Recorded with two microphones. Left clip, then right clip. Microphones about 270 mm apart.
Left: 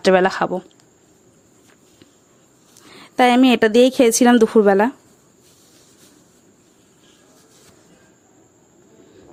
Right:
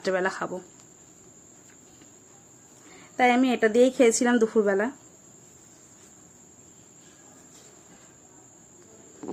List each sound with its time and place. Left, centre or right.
0.0 s a woman's voice: left
2.9 s a woman's voice: left